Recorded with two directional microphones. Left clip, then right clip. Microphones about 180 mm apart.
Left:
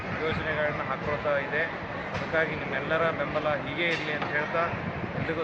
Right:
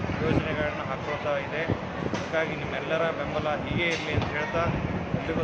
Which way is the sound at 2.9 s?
10° left (ahead or behind).